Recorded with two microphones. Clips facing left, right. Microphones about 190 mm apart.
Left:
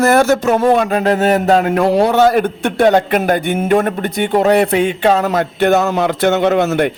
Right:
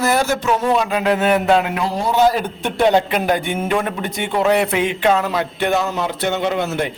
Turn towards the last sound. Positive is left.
turn(degrees=60)  # may be behind; listen again after turning